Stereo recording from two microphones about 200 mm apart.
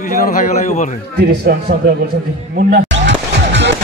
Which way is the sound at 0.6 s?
35° left (ahead or behind).